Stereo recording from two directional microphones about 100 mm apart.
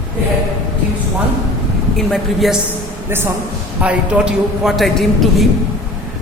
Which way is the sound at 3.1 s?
25° right (ahead or behind).